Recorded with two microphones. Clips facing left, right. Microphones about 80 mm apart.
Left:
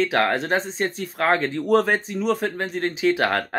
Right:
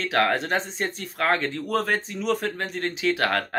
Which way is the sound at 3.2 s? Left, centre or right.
Centre.